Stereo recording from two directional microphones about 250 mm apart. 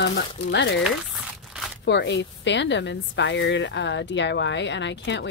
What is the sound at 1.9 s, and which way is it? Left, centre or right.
A woman's voice, left.